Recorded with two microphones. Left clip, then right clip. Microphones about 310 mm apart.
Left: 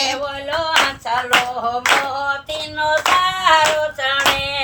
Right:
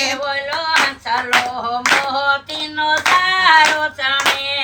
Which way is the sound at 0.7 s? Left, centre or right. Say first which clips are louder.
Right 1 dB; left.